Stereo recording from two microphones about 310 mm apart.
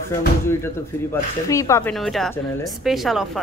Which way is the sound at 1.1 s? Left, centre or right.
Centre.